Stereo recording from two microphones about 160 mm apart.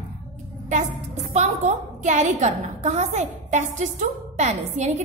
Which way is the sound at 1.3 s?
45° right (ahead or behind).